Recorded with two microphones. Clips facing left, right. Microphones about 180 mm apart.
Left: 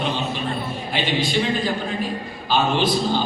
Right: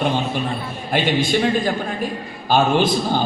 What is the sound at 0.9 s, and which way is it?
A man's voice, 50° right (ahead or behind).